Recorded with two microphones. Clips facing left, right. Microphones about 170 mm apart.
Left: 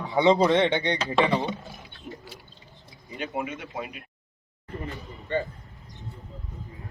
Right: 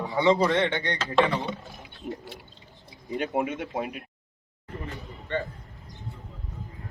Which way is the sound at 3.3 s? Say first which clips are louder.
Right 3 dB; 50° right (ahead or behind).